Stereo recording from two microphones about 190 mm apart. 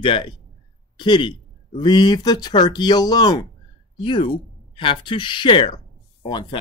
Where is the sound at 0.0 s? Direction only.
25° left (ahead or behind).